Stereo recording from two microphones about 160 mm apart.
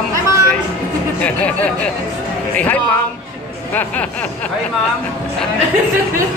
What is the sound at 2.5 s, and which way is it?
Speech, 10° left (ahead or behind).